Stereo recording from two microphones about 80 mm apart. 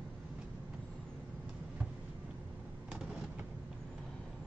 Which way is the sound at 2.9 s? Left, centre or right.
Centre.